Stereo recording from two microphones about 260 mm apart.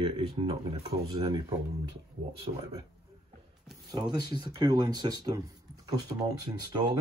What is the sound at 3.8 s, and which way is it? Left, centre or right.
Speech, centre.